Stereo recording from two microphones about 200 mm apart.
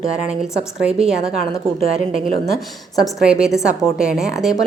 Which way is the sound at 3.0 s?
5° right (ahead or behind).